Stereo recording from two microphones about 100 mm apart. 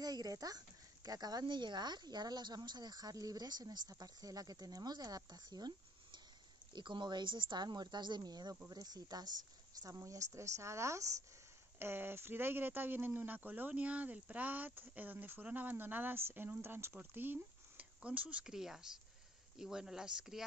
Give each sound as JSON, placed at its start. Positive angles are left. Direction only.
{"t": 0.0, "sound": "speech", "side_deg": -40}
{"t": 6.7, "sound": "a woman's voice", "side_deg": -50}